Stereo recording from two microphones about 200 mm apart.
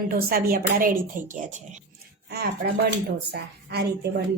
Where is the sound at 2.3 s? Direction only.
55° right (ahead or behind).